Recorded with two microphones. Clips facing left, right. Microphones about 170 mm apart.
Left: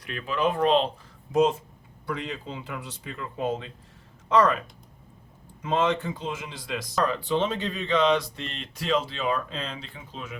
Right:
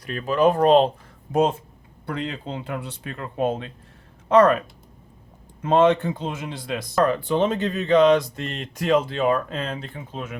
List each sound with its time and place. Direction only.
0.0 s speech: 40° right (ahead or behind)
1.3 s speech: 55° right (ahead or behind)
5.6 s speech: 60° right (ahead or behind)